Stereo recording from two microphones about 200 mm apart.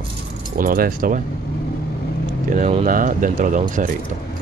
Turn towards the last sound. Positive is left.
turn(degrees=-40)  # may be behind; listen again after turning